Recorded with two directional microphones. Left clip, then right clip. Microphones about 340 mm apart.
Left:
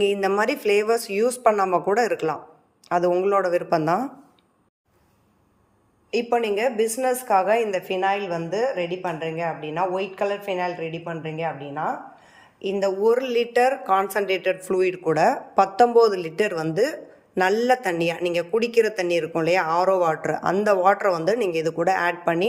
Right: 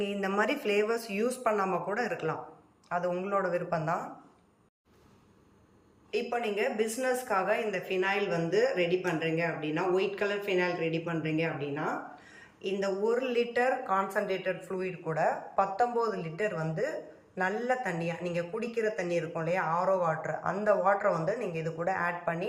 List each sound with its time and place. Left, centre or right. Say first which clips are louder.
0.0 s speech: left 9 dB; centre
6.1 s a woman's voice: left 9 dB; centre